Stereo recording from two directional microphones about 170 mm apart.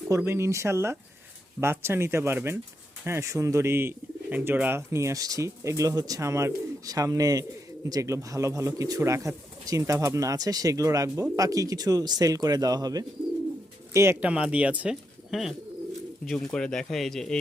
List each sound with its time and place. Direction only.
0.1 s speech: 15° right (ahead or behind); by 17.3 s centre (ahead or behind)